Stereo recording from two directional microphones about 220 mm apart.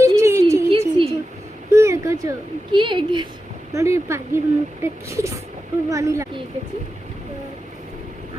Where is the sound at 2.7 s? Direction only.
20° right (ahead or behind).